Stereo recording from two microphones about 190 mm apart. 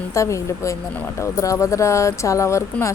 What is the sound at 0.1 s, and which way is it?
Speech, 15° left (ahead or behind).